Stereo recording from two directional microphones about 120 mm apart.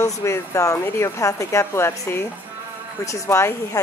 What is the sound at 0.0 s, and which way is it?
Speech, 25° left (ahead or behind).